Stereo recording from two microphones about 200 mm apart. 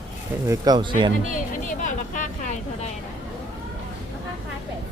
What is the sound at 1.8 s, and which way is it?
Vehicle, 40° left (ahead or behind).